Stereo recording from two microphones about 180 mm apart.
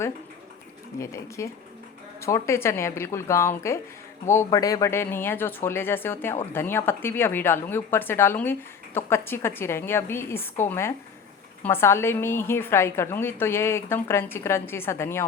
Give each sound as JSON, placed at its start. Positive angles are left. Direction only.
{"t": 0.9, "sound": "a woman's voice", "side_deg": 15}